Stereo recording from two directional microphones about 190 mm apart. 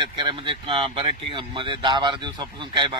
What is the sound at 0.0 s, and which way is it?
Speech, 25° right (ahead or behind).